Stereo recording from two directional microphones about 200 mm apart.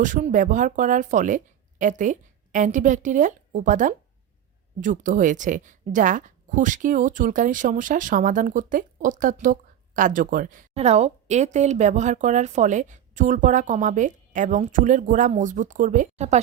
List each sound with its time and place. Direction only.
0.0 s a woman's voice: 40° right (ahead or behind)